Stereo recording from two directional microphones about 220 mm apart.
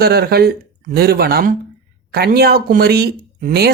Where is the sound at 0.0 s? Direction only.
45° right (ahead or behind).